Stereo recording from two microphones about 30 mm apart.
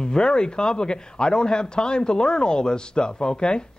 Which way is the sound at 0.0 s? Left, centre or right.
Left.